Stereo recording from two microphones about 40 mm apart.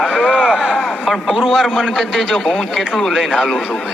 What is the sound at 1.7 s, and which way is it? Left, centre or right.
Speech, right.